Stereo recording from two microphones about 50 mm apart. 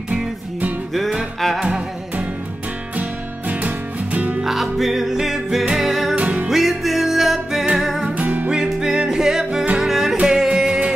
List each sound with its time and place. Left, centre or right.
3.0 s music: right
4.4 s music: centre
6.1 s music: right
6.5 s music: centre
8.0 s music: right
8.7 s music: centre